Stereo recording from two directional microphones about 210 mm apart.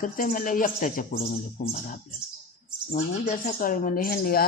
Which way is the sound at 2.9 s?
40° left (ahead or behind).